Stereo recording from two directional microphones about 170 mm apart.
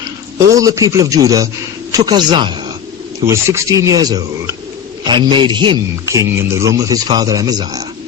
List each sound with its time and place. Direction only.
0.3 s a man's voice: 20° right (ahead or behind)